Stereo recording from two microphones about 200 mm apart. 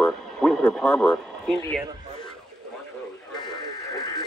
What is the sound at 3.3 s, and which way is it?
Radio, 20° left (ahead or behind).